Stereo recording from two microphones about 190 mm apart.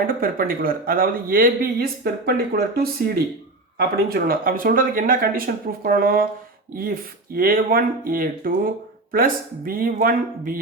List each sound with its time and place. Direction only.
0.2 s speech: 50° right (ahead or behind)
7.3 s speech: 50° right (ahead or behind)